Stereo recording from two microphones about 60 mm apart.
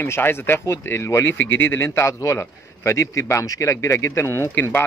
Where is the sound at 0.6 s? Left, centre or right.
Left.